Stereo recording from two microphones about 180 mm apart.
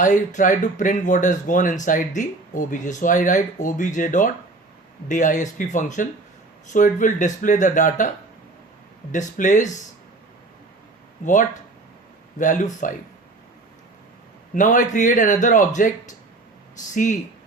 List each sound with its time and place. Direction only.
0.0 s speech: 45° left (ahead or behind)
9.1 s speech: 45° left (ahead or behind)
11.2 s speech: 45° left (ahead or behind)
12.4 s speech: 45° left (ahead or behind)
14.5 s speech: 45° left (ahead or behind)